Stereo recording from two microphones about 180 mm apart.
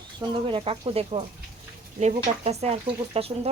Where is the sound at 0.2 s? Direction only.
30° right (ahead or behind).